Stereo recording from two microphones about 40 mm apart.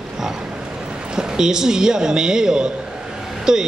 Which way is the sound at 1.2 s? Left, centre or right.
Centre.